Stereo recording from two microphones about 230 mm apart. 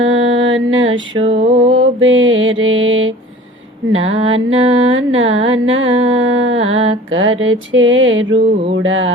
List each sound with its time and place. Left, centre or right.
0.0 s mantra: right
1.1 s a sound: right
1.7 s music: right